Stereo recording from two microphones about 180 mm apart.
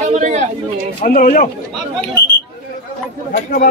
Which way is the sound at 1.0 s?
50° left (ahead or behind).